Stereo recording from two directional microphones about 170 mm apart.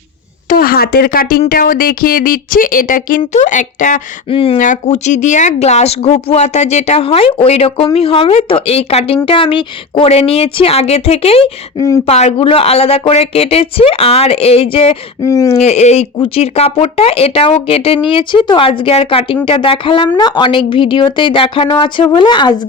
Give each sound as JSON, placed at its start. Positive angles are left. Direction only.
{"t": 0.4, "sound": "speech", "side_deg": 60}
{"t": 4.3, "sound": "speech", "side_deg": 30}
{"t": 4.5, "sound": "speech", "side_deg": 50}
{"t": 15.2, "sound": "a woman's voice", "side_deg": 20}
{"t": 15.5, "sound": "a woman's voice", "side_deg": 40}